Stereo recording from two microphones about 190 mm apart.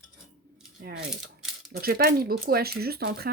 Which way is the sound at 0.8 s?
60° right (ahead or behind).